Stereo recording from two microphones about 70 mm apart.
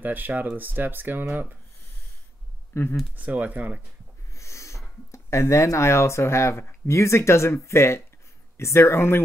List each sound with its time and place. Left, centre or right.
0.0 s speech: right
2.7 s speech: left
3.2 s speech: right
4.4 s a sound: left
6.9 s speech: left